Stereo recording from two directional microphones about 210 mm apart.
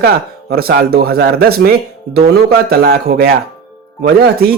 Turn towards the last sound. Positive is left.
turn(degrees=-50)  # may be behind; listen again after turning